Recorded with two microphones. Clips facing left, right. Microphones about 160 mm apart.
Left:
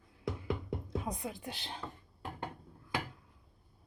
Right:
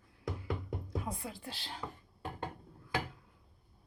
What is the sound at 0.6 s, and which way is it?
Speech, 20° left (ahead or behind).